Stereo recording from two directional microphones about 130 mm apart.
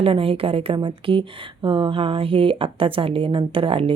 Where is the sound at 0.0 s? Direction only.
45° right (ahead or behind).